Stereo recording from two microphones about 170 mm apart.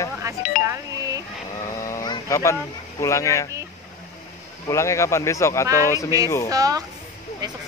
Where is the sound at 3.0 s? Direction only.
15° left (ahead or behind).